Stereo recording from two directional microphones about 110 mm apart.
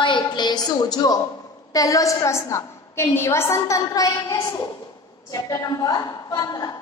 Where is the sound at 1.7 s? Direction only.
30° left (ahead or behind).